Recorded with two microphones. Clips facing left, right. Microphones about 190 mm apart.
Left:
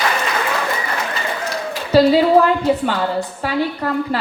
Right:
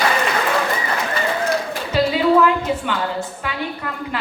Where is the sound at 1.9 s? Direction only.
35° left (ahead or behind).